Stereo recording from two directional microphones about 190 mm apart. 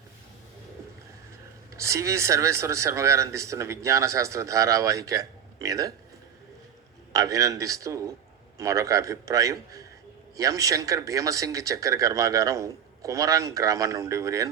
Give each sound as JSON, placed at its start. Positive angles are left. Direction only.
{"t": 1.8, "sound": "speech", "side_deg": -15}
{"t": 7.1, "sound": "speech", "side_deg": -20}